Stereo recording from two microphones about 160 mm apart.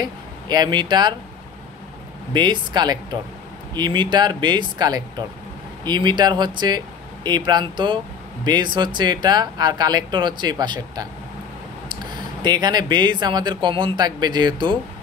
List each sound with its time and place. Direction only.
0.0 s speech: 25° right (ahead or behind)
2.3 s speech: 30° right (ahead or behind)